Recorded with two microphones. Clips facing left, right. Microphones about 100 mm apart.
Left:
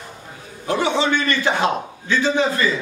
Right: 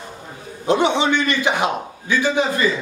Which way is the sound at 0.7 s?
20° right (ahead or behind).